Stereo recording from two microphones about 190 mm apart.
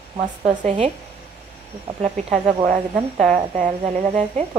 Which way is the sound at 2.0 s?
35° right (ahead or behind).